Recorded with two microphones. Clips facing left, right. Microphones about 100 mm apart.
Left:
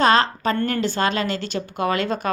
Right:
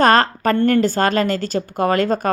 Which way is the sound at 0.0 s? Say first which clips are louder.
Right 3 dB; 50° right (ahead or behind).